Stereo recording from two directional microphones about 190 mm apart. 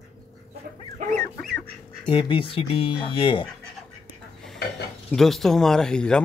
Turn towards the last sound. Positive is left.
turn(degrees=5)  # may be behind; listen again after turning